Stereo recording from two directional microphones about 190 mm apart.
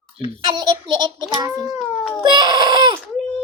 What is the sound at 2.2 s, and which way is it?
Baby cry, 25° right (ahead or behind).